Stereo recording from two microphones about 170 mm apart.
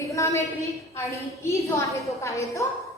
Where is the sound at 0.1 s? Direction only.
20° left (ahead or behind).